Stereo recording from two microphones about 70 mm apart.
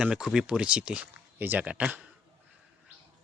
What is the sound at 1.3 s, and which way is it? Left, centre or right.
Speech, right.